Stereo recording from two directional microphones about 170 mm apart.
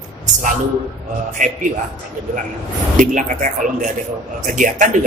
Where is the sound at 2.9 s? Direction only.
50° right (ahead or behind).